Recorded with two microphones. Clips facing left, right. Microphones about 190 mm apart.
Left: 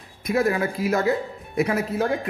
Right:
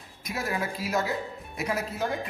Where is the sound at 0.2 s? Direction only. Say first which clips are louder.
Left 10 dB; 55° left (ahead or behind).